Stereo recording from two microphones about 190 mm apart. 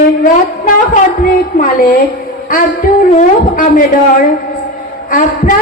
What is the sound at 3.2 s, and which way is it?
Speech, 40° left (ahead or behind).